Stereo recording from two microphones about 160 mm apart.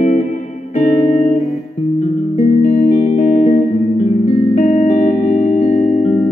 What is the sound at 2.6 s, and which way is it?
Music, 50° left (ahead or behind).